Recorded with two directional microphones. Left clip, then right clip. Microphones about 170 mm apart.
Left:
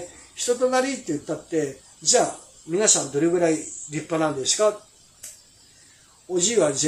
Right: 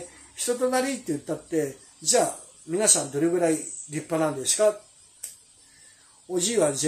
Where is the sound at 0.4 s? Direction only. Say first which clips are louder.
Left 3 dB; 25° right (ahead or behind).